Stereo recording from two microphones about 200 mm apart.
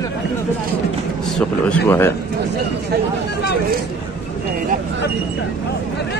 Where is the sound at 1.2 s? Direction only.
5° left (ahead or behind).